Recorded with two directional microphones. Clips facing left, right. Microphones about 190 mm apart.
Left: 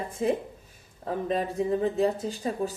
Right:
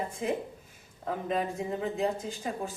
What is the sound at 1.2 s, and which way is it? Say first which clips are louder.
Speech: left 5 dB; 35° left (ahead or behind).